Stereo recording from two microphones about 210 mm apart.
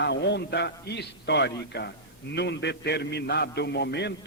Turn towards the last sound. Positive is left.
turn(degrees=55)  # may be behind; listen again after turning